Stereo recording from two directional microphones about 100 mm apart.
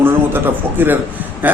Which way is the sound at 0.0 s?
20° right (ahead or behind).